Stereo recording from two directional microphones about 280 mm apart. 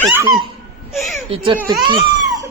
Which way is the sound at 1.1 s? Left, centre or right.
Right.